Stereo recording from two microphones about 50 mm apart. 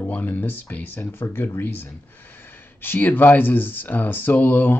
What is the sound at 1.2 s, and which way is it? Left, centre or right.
Speech, left.